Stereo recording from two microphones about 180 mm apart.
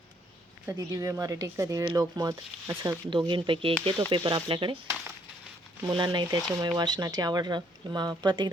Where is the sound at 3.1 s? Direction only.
25° right (ahead or behind).